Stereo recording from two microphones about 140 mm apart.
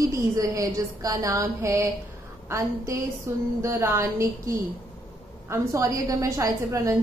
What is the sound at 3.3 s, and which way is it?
A woman's voice, 20° right (ahead or behind).